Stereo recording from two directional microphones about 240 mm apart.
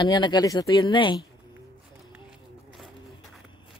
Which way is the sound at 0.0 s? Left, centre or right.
Centre.